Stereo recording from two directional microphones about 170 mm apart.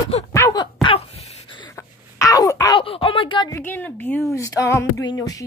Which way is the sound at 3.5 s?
10° left (ahead or behind).